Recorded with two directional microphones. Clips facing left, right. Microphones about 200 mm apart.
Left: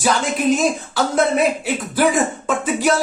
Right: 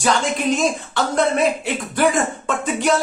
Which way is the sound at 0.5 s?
Centre (ahead or behind).